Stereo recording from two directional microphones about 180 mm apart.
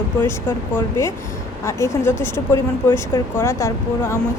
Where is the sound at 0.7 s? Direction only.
15° left (ahead or behind).